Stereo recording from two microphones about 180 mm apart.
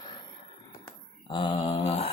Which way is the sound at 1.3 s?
25° left (ahead or behind).